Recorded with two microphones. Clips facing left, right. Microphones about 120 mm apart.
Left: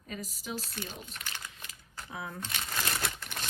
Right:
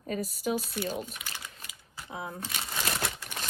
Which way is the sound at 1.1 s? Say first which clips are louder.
Right 1 dB; 10° right (ahead or behind).